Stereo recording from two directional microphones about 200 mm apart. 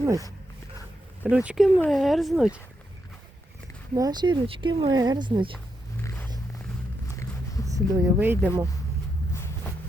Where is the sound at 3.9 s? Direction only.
20° right (ahead or behind).